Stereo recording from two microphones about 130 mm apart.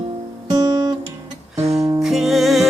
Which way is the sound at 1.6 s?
25° right (ahead or behind).